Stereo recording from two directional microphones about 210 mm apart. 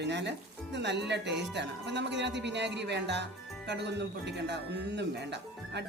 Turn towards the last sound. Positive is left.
turn(degrees=-55)  # may be behind; listen again after turning